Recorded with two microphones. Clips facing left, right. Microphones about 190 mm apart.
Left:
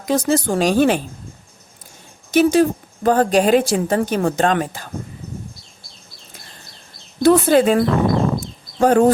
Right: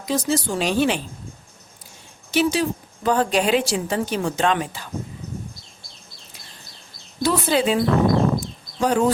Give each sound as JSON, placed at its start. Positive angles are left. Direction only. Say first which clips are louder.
{"t": 0.0, "sound": "a woman's voice", "louder": "left 5 dB", "side_deg": 55}
{"t": 2.3, "sound": "a woman's voice", "louder": "left 7 dB", "side_deg": 50}
{"t": 7.2, "sound": "a woman's voice", "louder": "left 8 dB", "side_deg": 55}